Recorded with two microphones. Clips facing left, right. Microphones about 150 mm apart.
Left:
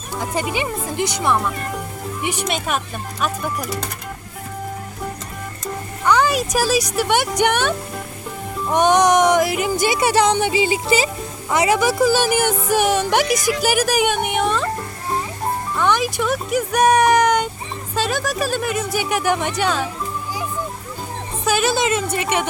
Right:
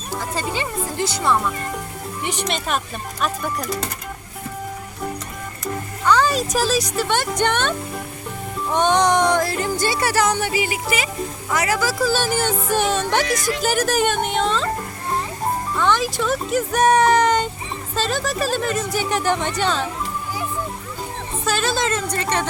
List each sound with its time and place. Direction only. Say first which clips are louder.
0.2 s speech: left 4 dB; 15° left (ahead or behind)
6.1 s speech: left 1 dB; 15° left (ahead or behind)
15.8 s speech: left 1 dB; 15° left (ahead or behind)
21.4 s a woman's voice: left 3 dB; 10° left (ahead or behind)